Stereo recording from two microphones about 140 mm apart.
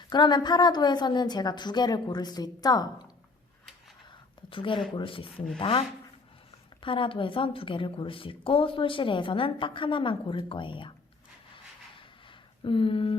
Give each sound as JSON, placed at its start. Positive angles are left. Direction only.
{"t": 0.1, "sound": "a woman's voice", "side_deg": 30}
{"t": 4.4, "sound": "a woman's voice", "side_deg": 35}
{"t": 6.8, "sound": "a woman's voice", "side_deg": 40}
{"t": 12.6, "sound": "a woman's voice", "side_deg": 40}